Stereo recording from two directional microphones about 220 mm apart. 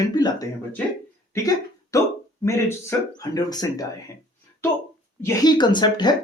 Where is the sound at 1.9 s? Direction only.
15° left (ahead or behind).